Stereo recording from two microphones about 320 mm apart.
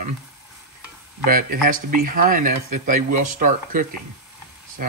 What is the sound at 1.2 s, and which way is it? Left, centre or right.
Speech, right.